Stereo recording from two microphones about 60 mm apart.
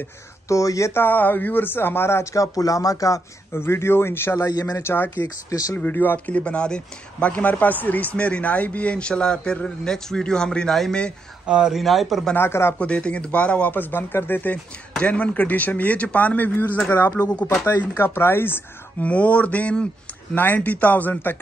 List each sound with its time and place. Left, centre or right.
0.5 s speech: left
0.9 s speech: left
2.3 s speech: left
3.5 s speech: left
4.5 s speech: left
4.8 s speech: left; by 11.1 s centre
11.4 s speech: centre
11.7 s speech: centre
12.4 s speech: left
12.7 s speech: centre
15.0 s speech: centre; by 19.0 s left
19.0 s speech: left